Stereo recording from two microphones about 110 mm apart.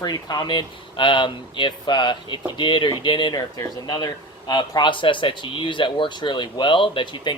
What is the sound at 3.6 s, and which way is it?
Speech, 35° left (ahead or behind).